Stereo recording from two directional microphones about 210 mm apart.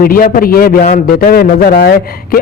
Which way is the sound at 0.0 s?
45° left (ahead or behind).